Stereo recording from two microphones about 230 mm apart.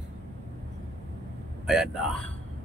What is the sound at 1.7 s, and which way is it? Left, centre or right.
Speech, centre.